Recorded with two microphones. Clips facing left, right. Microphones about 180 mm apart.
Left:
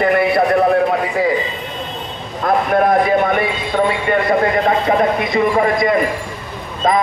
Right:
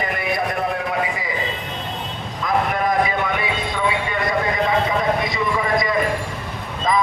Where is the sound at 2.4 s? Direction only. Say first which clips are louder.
Left 6 dB; 60° left (ahead or behind).